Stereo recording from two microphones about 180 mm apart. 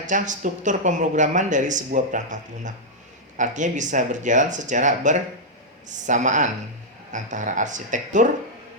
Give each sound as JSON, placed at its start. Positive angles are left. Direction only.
{"t": 0.0, "sound": "speech", "side_deg": -45}